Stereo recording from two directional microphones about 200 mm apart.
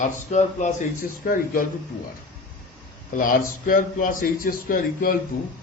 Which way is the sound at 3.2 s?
45° left (ahead or behind).